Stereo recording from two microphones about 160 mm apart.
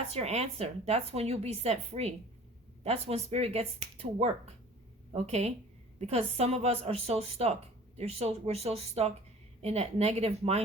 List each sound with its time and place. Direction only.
0.1 s a woman's voice: 40° right (ahead or behind)